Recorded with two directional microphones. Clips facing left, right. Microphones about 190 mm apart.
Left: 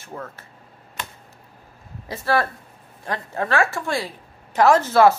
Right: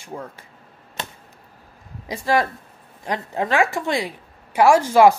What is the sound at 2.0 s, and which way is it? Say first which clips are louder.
Speech: right 1 dB; 15° right (ahead or behind).